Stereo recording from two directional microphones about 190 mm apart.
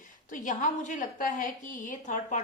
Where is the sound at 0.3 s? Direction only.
45° left (ahead or behind).